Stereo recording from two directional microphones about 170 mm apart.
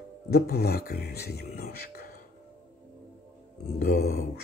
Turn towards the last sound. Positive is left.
turn(degrees=65)  # may be behind; listen again after turning